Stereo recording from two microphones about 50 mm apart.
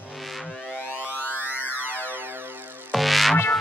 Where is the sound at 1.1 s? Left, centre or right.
Right.